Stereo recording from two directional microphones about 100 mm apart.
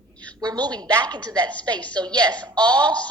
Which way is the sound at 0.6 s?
45° right (ahead or behind).